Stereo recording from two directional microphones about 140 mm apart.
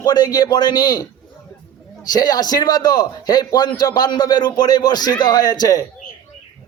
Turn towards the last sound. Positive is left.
turn(degrees=25)  # may be behind; listen again after turning